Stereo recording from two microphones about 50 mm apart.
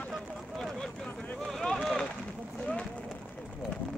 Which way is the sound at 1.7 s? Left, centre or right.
Centre.